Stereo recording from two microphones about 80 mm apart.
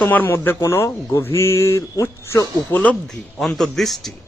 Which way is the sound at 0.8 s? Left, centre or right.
Left.